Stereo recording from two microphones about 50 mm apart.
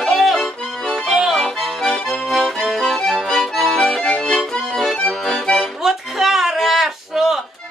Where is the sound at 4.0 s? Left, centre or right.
Centre.